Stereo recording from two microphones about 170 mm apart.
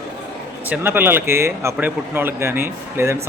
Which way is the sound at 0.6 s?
10° right (ahead or behind).